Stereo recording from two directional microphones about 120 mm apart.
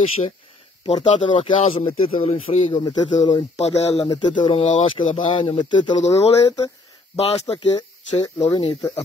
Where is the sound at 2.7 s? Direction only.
40° left (ahead or behind).